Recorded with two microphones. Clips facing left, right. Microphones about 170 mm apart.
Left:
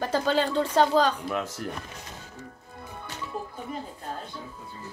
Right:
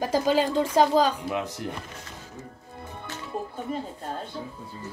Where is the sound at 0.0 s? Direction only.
10° right (ahead or behind).